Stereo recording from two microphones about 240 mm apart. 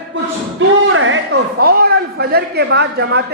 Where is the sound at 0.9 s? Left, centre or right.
Right.